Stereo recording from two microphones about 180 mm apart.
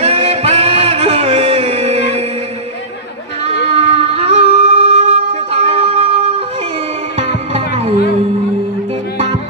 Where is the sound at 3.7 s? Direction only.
35° right (ahead or behind).